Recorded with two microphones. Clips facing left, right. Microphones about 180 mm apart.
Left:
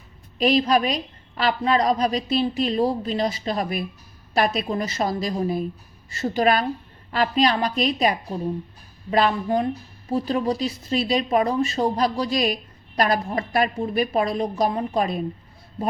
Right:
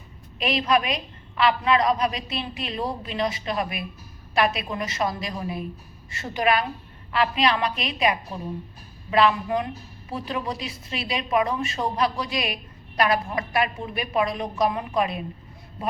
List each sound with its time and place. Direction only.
0.3 s a woman's voice: 35° left (ahead or behind)